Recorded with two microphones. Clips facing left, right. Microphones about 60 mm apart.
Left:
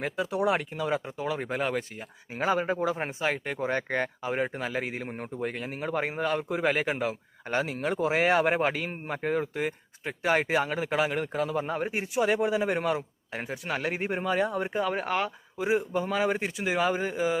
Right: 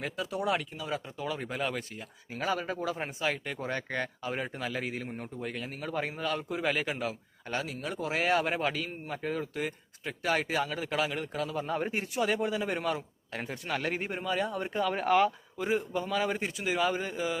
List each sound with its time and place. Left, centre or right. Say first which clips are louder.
0.0 s speech: left 5 dB; left
5.0 s speech: left 5 dB; left
11.7 s speech: left 1 dB; centre
12.2 s speech: left 5 dB; left
13.0 s speech: left 3 dB; centre
14.0 s speech: left 4 dB; left
14.9 s speech: right 4 dB; centre
15.5 s speech: left 7 dB; centre
16.0 s speech: left 3 dB; left